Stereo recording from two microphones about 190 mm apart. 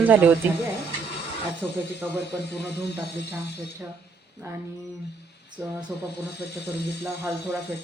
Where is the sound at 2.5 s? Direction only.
60° left (ahead or behind).